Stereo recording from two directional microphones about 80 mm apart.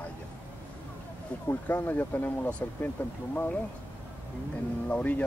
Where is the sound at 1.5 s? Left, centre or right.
Left.